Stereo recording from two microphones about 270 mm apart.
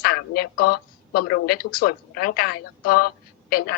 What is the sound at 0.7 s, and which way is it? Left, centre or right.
A woman's voice, left.